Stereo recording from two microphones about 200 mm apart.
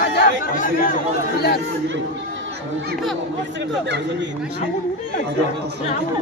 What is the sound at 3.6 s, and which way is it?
Speech, 60° right (ahead or behind).